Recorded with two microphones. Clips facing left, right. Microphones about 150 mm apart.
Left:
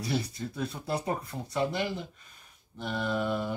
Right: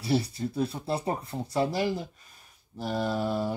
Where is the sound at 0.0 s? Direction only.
30° right (ahead or behind).